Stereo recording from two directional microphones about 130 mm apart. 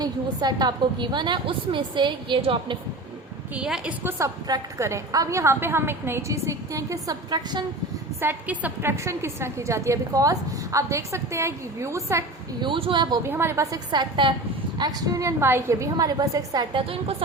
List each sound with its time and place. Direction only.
0.0 s a woman's voice: 30° right (ahead or behind)
3.5 s a woman's voice: 10° right (ahead or behind)
4.2 s a woman's voice: 25° right (ahead or behind)
8.2 s a woman's voice: 15° right (ahead or behind)
12.5 s a woman's voice: 40° right (ahead or behind)
13.2 s a woman's voice: 20° right (ahead or behind)
16.7 s a woman's voice: 45° right (ahead or behind)